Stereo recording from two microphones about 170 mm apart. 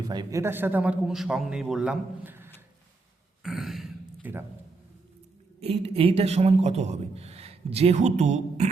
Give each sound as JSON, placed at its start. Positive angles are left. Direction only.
{"t": 0.1, "sound": "speech", "side_deg": -20}
{"t": 3.4, "sound": "a sound", "side_deg": 0}
{"t": 5.5, "sound": "a man's voice", "side_deg": -35}